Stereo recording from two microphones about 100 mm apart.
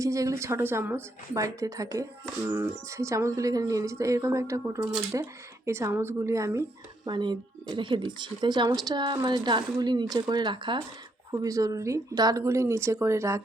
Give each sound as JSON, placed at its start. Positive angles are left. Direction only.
{"t": 0.0, "sound": "speech", "side_deg": -35}
{"t": 7.0, "sound": "speech", "side_deg": -45}
{"t": 11.3, "sound": "speech", "side_deg": -35}